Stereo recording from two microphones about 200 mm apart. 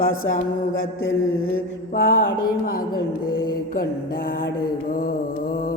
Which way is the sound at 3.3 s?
45° left (ahead or behind).